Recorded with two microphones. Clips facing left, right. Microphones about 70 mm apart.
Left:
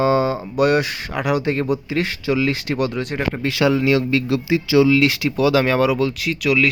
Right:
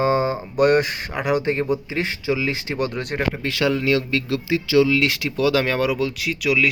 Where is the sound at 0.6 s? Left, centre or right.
Right; by 2.8 s centre.